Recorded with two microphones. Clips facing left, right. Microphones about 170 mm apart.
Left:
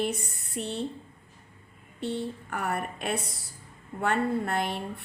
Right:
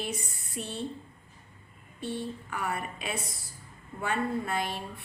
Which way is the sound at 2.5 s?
55° left (ahead or behind).